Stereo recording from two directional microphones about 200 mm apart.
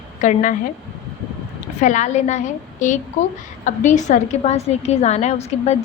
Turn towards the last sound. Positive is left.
turn(degrees=35)  # may be behind; listen again after turning